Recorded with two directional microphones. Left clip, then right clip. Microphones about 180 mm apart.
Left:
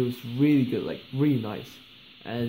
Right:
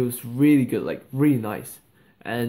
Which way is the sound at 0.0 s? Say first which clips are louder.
Right 4 dB; centre (ahead or behind).